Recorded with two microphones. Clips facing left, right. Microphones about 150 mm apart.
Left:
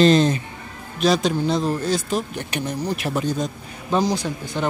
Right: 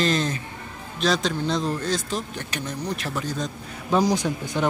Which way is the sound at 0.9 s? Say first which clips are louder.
Left 4 dB; 10° left (ahead or behind).